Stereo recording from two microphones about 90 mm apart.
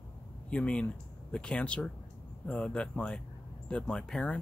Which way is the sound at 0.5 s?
10° left (ahead or behind).